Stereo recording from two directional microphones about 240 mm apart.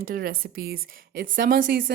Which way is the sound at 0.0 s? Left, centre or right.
Right.